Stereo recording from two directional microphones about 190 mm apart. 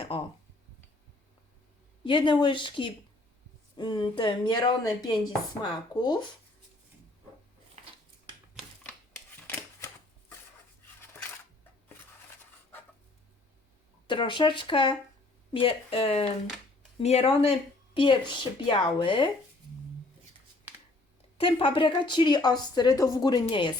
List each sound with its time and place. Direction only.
0.1 s a sound: 30° left (ahead or behind)
2.0 s speech: 25° left (ahead or behind)
8.5 s typewriter: 5° left (ahead or behind)
14.1 s speech: 25° left (ahead or behind)
18.6 s speech: 25° left (ahead or behind)
21.3 s speech: 30° left (ahead or behind)